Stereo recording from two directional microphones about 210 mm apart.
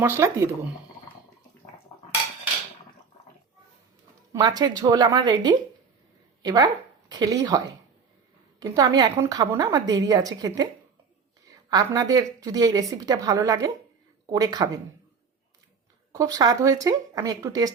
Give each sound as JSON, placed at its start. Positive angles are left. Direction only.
{"t": 0.0, "sound": "a woman's voice", "side_deg": -10}
{"t": 4.3, "sound": "a woman's voice", "side_deg": -20}
{"t": 11.7, "sound": "a woman's voice", "side_deg": -15}
{"t": 16.1, "sound": "a woman's voice", "side_deg": -15}